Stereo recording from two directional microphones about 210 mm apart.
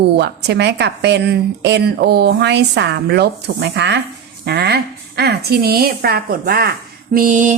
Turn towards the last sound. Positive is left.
turn(degrees=-40)  # may be behind; listen again after turning